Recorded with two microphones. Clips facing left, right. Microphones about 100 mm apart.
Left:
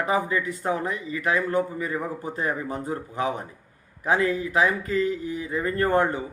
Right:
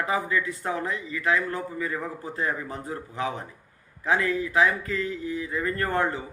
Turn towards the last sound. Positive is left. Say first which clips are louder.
# left 4 dB
turn(degrees=25)  # may be behind; listen again after turning